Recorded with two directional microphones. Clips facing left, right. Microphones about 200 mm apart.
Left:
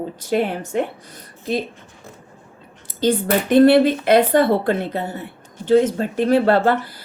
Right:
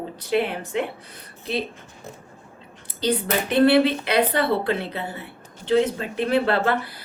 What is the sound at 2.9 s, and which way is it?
A woman's voice, 50° left (ahead or behind).